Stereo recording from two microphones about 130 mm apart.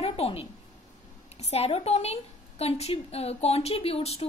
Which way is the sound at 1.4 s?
50° left (ahead or behind).